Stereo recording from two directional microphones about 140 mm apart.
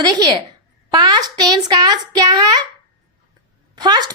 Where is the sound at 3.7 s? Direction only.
30° right (ahead or behind).